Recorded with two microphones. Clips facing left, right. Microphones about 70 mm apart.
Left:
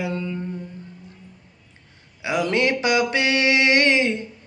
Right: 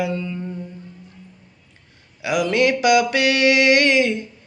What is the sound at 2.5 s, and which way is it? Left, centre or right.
Mantra, left.